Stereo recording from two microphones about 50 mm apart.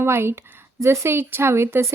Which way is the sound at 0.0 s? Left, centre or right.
Right.